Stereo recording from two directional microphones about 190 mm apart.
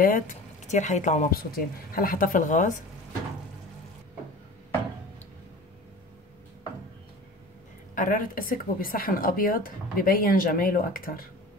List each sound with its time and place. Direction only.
0.0 s speech: 45° left (ahead or behind)
7.9 s speech: 45° left (ahead or behind)